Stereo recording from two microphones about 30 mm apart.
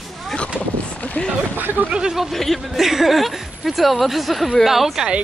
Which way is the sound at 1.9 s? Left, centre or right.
Right.